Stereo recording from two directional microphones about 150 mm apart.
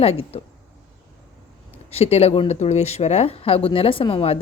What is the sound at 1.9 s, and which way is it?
Speech, 45° left (ahead or behind).